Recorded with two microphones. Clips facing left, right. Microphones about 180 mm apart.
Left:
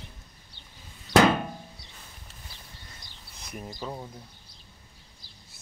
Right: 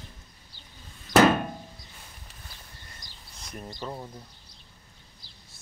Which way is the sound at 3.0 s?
60° left (ahead or behind).